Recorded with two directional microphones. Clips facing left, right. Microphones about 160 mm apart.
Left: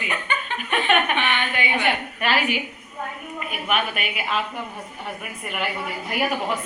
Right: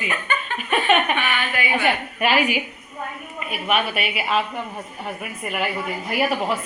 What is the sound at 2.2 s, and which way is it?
A woman's voice, 10° right (ahead or behind).